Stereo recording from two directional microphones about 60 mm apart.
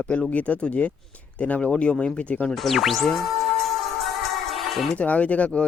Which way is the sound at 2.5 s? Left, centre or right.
Centre.